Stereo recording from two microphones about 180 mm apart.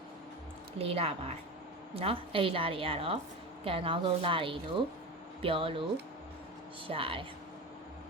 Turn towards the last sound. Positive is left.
turn(degrees=-30)  # may be behind; listen again after turning